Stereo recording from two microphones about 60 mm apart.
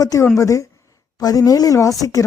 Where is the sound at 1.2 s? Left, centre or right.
Left.